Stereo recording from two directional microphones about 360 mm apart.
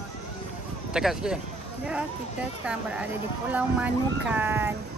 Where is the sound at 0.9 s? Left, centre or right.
Centre.